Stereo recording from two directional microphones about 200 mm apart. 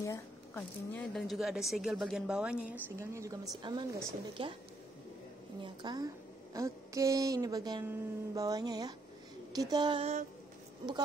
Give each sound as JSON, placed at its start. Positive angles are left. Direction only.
{"t": 0.0, "sound": "a woman's voice", "side_deg": 10}
{"t": 5.6, "sound": "a woman's voice", "side_deg": -20}